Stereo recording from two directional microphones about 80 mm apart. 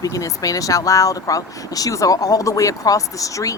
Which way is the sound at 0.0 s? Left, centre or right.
Left.